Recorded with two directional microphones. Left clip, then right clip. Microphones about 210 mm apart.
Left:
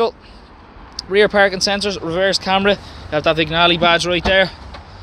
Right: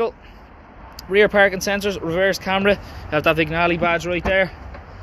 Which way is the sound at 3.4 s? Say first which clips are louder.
Left 5 dB; 15° left (ahead or behind).